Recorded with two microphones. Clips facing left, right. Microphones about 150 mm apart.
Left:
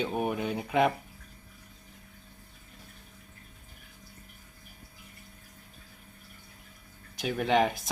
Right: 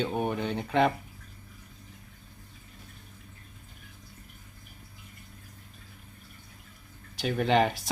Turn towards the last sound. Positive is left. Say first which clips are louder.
# right 1 dB
turn(degrees=0)  # may be behind; listen again after turning